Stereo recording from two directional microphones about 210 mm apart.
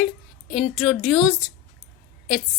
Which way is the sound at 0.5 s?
Centre (ahead or behind).